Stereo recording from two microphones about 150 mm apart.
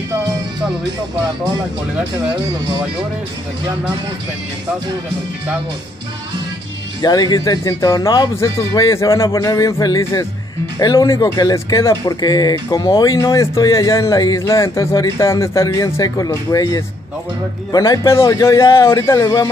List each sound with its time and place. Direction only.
7.0 s speech: 25° left (ahead or behind)